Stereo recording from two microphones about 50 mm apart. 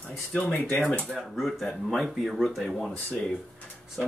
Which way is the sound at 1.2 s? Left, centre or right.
Centre.